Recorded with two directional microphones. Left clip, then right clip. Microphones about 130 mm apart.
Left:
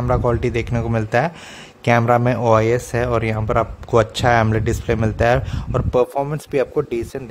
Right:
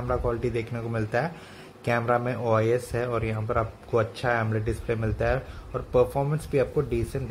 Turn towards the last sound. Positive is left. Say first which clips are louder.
# left 6 dB
turn(degrees=45)  # may be behind; listen again after turning